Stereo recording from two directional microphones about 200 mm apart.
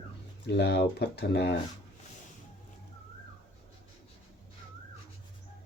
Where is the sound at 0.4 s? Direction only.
55° left (ahead or behind).